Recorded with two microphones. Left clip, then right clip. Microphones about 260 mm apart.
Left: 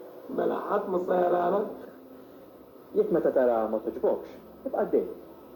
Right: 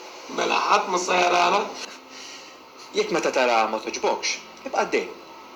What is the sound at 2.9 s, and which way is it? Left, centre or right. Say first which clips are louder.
Speech: right 1 dB; centre.